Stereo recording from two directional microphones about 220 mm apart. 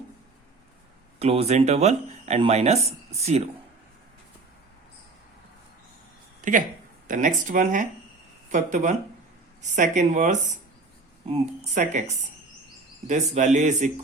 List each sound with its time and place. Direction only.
1.2 s speech: 30° right (ahead or behind)
6.4 s speech: 35° right (ahead or behind)
13.1 s speech: 35° right (ahead or behind)